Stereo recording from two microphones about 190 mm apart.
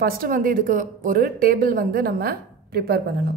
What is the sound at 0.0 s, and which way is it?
A woman's voice, 50° right (ahead or behind).